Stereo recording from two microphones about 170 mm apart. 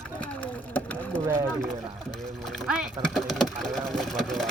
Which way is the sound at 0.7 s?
10° left (ahead or behind).